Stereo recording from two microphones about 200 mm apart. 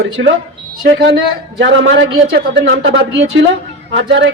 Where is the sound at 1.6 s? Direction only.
70° right (ahead or behind).